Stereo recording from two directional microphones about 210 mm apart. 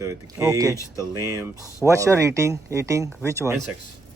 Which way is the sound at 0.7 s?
15° left (ahead or behind).